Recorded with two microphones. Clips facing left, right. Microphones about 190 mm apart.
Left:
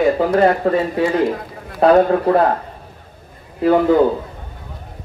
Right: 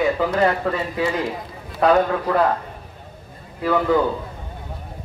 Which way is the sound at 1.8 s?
35° left (ahead or behind).